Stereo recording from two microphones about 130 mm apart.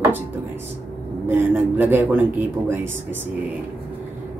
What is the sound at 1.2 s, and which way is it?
Speech, 15° right (ahead or behind).